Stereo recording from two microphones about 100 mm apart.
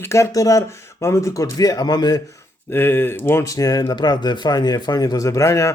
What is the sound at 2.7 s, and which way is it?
Speech, 20° left (ahead or behind).